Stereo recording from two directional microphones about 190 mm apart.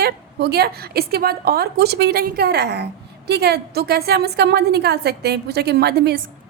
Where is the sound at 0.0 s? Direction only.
60° right (ahead or behind).